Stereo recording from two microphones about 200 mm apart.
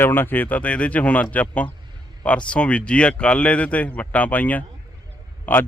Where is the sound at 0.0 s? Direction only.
10° left (ahead or behind).